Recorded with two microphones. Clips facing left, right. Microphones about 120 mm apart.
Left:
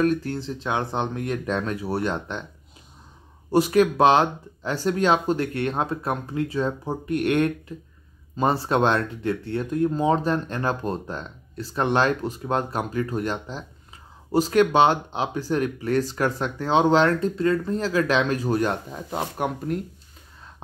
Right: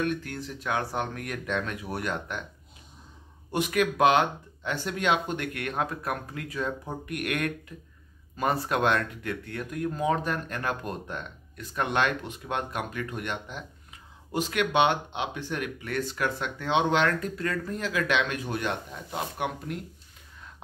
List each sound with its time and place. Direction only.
0.0 s speech: 35° left (ahead or behind)
3.5 s speech: 30° left (ahead or behind)